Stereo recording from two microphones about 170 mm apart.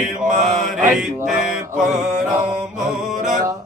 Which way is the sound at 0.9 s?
5° right (ahead or behind).